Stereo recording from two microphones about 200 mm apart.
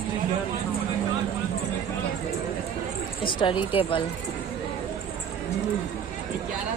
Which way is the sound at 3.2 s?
25° left (ahead or behind).